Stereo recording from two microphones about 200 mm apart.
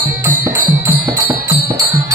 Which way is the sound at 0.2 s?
15° right (ahead or behind).